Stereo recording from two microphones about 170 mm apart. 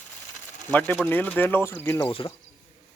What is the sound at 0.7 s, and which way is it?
Speech, 10° left (ahead or behind).